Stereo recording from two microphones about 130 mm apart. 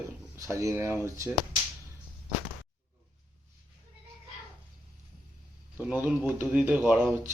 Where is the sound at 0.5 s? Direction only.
25° right (ahead or behind).